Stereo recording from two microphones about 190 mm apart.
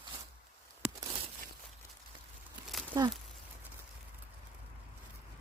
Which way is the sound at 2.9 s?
20° right (ahead or behind).